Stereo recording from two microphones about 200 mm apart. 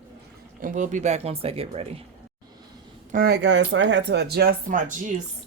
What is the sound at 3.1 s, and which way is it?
Speech, 50° right (ahead or behind).